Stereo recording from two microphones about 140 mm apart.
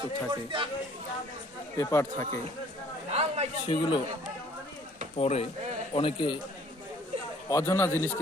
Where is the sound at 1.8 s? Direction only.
20° left (ahead or behind).